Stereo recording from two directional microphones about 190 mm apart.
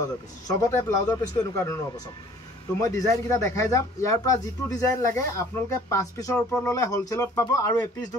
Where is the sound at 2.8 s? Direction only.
15° left (ahead or behind).